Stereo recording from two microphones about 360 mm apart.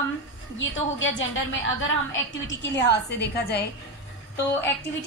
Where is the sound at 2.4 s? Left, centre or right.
Left.